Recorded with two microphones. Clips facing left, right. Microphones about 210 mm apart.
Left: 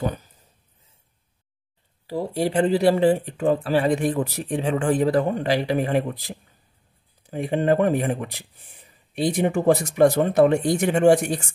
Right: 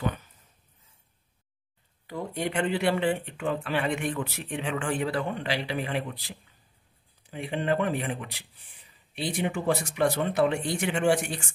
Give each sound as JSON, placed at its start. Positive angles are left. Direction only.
{"t": 0.0, "sound": "speech", "side_deg": 40}
{"t": 2.0, "sound": "speech", "side_deg": 35}